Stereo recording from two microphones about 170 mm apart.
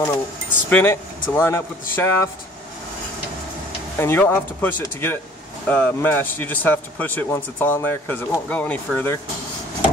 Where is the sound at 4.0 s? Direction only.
10° left (ahead or behind).